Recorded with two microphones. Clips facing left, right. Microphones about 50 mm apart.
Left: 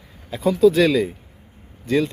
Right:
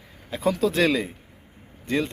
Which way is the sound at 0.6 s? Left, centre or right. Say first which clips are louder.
Left 8 dB; right.